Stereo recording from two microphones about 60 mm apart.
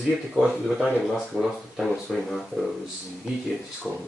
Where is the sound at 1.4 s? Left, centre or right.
Centre.